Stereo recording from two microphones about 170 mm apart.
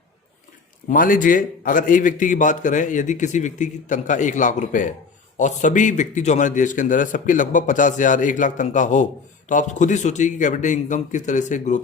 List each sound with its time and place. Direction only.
0.9 s a man's voice: 55° left (ahead or behind)